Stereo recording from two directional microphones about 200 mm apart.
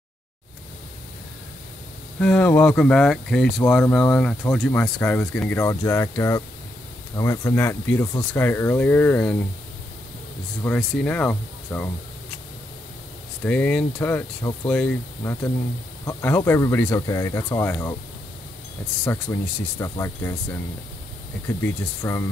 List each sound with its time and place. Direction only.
2.1 s speech: 5° left (ahead or behind)
10.6 s speech: 5° left (ahead or behind)
13.4 s speech: 5° left (ahead or behind)
19.0 s speech: 15° left (ahead or behind)
21.5 s speech: 15° left (ahead or behind)